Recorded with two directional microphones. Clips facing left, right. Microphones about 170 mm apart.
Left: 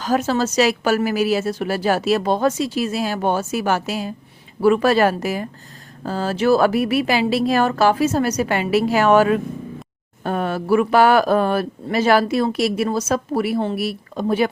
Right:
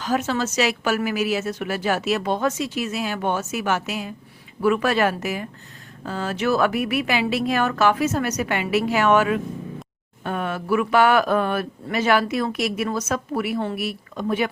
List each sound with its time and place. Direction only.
0.0 s speech: 40° left (ahead or behind)